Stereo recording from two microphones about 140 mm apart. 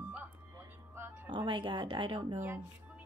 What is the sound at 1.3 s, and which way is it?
Speech, 35° right (ahead or behind).